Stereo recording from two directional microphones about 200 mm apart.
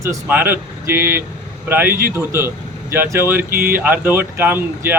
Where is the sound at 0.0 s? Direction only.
10° right (ahead or behind).